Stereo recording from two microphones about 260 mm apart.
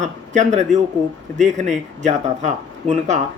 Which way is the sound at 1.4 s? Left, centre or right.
Centre.